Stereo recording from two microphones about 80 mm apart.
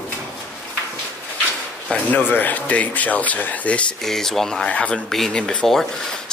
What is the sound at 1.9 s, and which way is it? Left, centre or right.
Speech, left.